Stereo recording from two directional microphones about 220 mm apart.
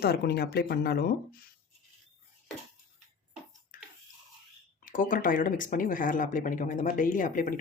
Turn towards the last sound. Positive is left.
turn(degrees=40)  # may be behind; listen again after turning